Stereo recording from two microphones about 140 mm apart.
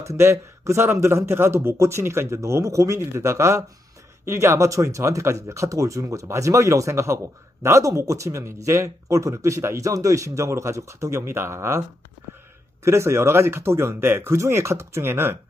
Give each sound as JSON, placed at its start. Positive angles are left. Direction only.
{"t": 0.0, "sound": "speech", "side_deg": -20}
{"t": 12.8, "sound": "speech", "side_deg": -20}